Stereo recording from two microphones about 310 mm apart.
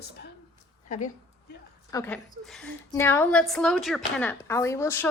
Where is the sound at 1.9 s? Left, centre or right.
Centre.